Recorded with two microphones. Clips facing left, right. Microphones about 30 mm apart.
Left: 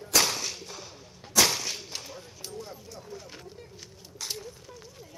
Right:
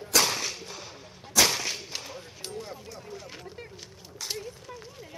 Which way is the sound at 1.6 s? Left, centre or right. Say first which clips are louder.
Right 2 dB; centre.